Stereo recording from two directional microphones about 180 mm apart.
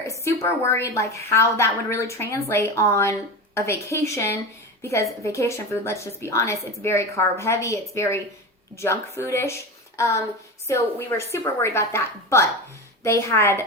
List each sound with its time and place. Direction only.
0.1 s a sound: 15° left (ahead or behind)
0.7 s a woman's voice: 15° left (ahead or behind)
10.7 s a woman's voice: 15° left (ahead or behind)